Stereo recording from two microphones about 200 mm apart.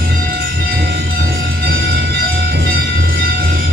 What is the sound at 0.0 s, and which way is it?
Music, 50° right (ahead or behind).